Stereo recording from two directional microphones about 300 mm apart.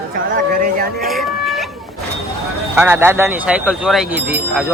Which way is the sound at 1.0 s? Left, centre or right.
Centre.